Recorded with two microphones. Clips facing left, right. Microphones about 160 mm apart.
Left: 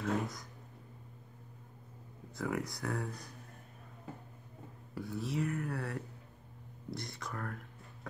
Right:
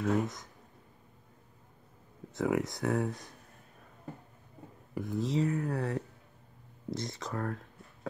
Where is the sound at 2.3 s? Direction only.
25° right (ahead or behind).